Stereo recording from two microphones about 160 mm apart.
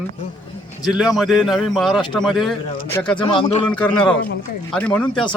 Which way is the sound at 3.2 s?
30° left (ahead or behind).